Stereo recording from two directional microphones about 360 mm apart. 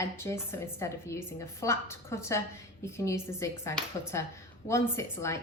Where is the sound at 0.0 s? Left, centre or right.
Centre.